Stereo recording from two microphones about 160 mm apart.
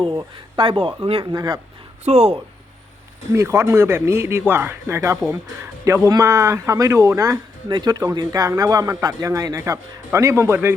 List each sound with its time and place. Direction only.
0.0 s speech: 30° right (ahead or behind)
2.0 s speech: 40° right (ahead or behind)
3.3 s speech: 15° right (ahead or behind)